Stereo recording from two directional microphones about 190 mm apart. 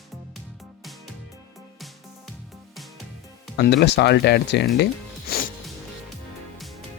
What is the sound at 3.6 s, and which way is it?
Speech, 65° left (ahead or behind).